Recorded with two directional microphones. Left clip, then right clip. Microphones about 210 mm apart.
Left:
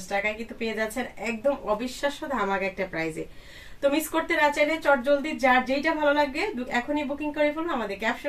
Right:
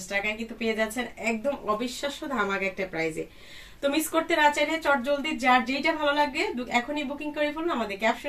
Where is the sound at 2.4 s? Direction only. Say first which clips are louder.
Right 1 dB; 15° left (ahead or behind).